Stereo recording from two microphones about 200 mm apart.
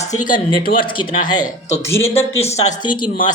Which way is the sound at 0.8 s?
20° left (ahead or behind).